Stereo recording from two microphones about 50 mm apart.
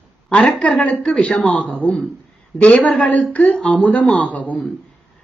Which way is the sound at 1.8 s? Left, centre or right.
Centre.